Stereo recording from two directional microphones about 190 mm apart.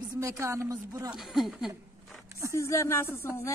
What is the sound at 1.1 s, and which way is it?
Speech, centre (ahead or behind).